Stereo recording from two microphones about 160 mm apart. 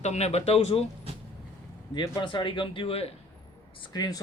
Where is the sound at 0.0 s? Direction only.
45° left (ahead or behind).